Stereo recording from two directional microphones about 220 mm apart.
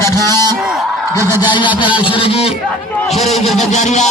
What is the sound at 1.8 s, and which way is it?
Speech, 5° right (ahead or behind).